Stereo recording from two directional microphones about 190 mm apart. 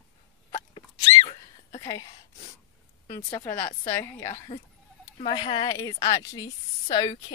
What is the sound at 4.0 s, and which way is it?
Speech, 15° left (ahead or behind).